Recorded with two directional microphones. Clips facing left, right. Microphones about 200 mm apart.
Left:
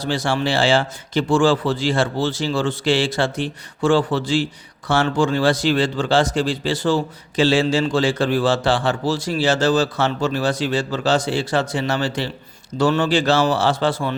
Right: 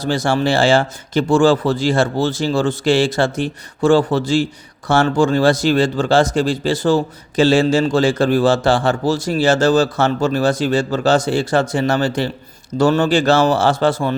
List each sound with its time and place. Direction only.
0.0 s a man's voice: 45° right (ahead or behind)